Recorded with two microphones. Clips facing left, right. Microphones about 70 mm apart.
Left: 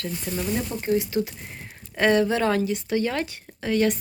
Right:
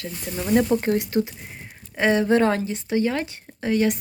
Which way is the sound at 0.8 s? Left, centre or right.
Right.